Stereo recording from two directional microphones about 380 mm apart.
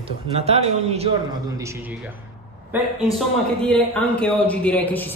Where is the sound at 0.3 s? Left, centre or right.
Centre.